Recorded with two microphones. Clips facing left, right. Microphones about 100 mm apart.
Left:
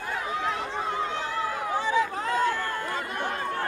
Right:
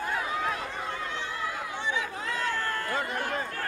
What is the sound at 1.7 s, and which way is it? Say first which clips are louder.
Chatter: left 7 dB; 40° left (ahead or behind).